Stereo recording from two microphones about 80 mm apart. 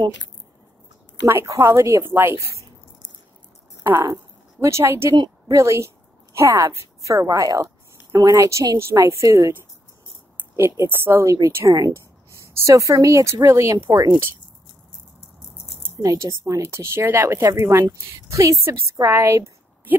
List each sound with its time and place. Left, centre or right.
1.2 s a woman's voice: right
3.8 s a woman's voice: right
10.5 s a woman's voice: right
11.5 s speech: right
13.8 s speech: right
16.0 s a woman's voice: right